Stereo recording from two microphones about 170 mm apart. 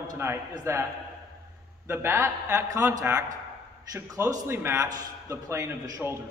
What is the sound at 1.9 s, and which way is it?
A man's voice, 15° right (ahead or behind).